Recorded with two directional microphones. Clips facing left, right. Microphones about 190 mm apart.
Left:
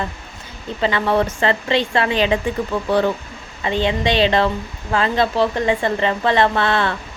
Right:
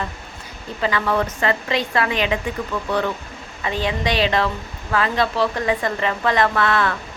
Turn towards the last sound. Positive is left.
turn(degrees=30)  # may be behind; listen again after turning